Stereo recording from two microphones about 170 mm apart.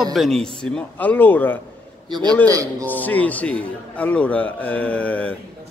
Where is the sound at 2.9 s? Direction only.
10° left (ahead or behind).